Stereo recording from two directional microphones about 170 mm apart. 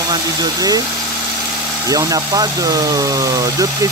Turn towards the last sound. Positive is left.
turn(degrees=-20)  # may be behind; listen again after turning